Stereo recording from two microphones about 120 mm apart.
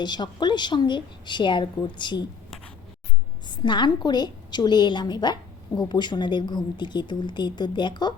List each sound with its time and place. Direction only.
0.0 s a woman's voice: 40° left (ahead or behind)
3.5 s a woman's voice: 40° left (ahead or behind)